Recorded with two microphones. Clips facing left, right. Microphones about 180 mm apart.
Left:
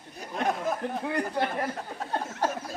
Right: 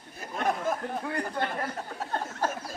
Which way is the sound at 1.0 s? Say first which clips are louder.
Left 3 dB; 20° left (ahead or behind).